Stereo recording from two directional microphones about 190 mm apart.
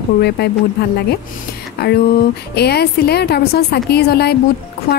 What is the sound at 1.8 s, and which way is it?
A woman's voice, 60° left (ahead or behind).